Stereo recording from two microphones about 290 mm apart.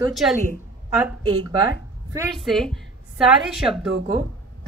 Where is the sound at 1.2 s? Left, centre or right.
Centre.